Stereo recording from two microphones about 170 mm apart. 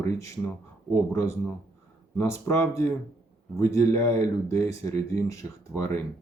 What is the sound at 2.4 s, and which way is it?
Speech, 15° left (ahead or behind).